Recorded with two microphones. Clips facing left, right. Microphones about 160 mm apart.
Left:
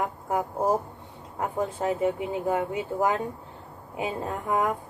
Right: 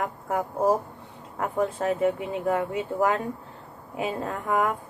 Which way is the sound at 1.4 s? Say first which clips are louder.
Right 2 dB; 20° left (ahead or behind).